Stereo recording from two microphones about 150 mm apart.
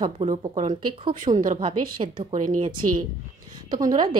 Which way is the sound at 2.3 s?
55° right (ahead or behind).